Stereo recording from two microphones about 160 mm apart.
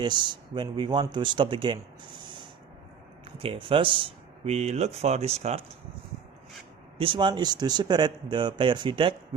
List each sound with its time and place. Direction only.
0.0 s speech: 30° right (ahead or behind)
3.3 s speech: 35° right (ahead or behind)
7.0 s speech: 30° right (ahead or behind)